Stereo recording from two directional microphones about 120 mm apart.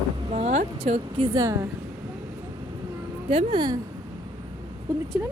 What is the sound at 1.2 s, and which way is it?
Speech, 30° right (ahead or behind).